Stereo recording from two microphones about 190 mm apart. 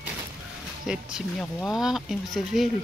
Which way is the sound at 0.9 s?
5° right (ahead or behind).